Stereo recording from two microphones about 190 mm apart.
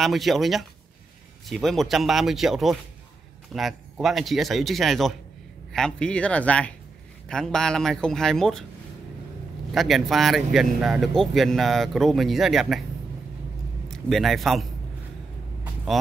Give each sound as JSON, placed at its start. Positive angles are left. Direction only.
{"t": 0.0, "sound": "speech", "side_deg": 0}
{"t": 9.7, "sound": "speech", "side_deg": 0}
{"t": 13.8, "sound": "a man's voice", "side_deg": 0}